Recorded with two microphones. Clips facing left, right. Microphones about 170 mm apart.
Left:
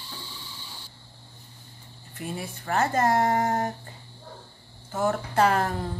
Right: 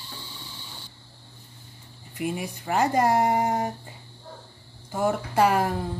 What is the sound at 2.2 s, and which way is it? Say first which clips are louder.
A woman's voice: right 5 dB; 10° right (ahead or behind).